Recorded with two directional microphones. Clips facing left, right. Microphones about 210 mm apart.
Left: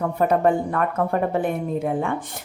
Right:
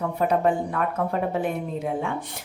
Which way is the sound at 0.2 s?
50° left (ahead or behind).